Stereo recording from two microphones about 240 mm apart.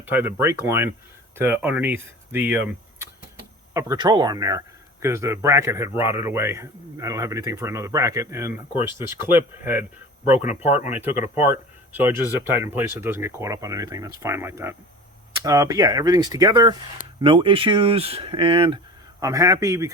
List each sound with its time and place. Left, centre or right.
0.0 s speech: centre
11.9 s speech: centre